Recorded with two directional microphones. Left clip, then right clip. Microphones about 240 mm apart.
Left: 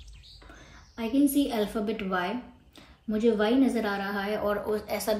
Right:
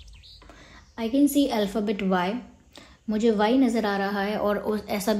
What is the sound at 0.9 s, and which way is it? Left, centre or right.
A woman's voice, right.